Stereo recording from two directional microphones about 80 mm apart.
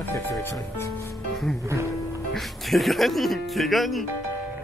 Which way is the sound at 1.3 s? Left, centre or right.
Centre.